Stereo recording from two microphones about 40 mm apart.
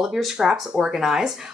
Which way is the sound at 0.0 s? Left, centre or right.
Centre.